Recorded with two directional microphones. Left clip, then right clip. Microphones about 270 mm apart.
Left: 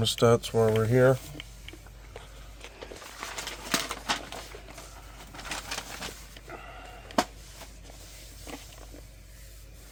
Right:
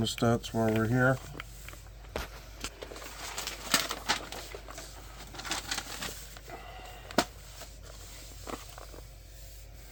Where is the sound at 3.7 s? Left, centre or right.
Centre.